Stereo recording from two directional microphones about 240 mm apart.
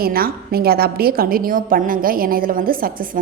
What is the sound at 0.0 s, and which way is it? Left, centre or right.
A woman's voice, right.